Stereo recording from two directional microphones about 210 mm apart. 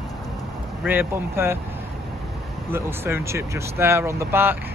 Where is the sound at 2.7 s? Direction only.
10° right (ahead or behind).